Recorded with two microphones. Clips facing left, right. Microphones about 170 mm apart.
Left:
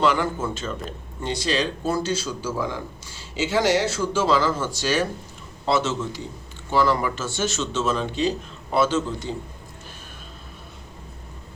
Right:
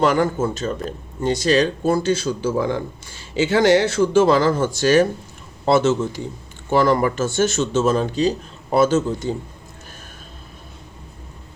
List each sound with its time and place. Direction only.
0.0 s speech: 45° right (ahead or behind)